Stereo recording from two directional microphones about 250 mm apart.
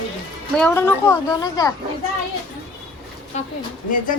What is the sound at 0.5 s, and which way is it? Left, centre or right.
A woman's voice, centre.